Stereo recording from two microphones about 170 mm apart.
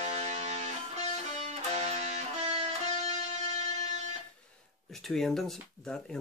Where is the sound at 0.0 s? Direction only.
40° right (ahead or behind).